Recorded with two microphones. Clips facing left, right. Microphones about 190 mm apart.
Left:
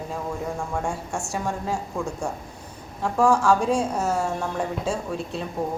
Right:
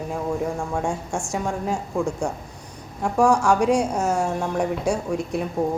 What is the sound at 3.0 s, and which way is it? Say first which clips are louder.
A woman's voice: right 1 dB; 15° right (ahead or behind).